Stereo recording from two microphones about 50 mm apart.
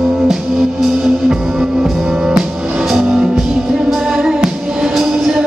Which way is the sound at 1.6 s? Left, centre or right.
Centre.